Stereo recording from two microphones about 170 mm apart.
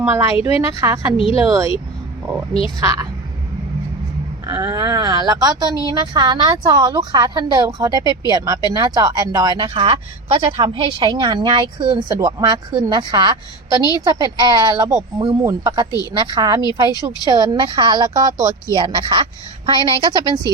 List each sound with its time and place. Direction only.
0.0 s a woman's voice: 15° right (ahead or behind)
1.1 s a woman's voice: 30° left (ahead or behind)
2.5 s a woman's voice: 35° left (ahead or behind)
2.8 s speech: 20° right (ahead or behind)
4.4 s speech: 20° right (ahead or behind)
14.8 s speech: 40° right (ahead or behind)
15.4 s speech: 20° right (ahead or behind)